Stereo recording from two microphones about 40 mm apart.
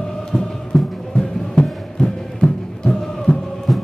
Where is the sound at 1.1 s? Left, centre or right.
Left.